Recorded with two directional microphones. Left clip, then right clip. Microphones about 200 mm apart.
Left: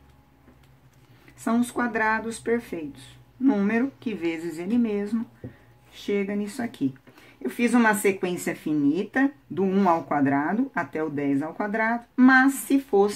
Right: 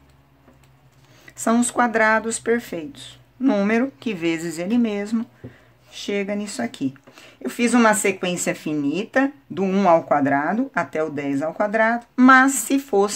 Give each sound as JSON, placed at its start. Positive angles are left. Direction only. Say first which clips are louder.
{"t": 1.3, "sound": "speech", "louder": "right 6 dB", "side_deg": -45}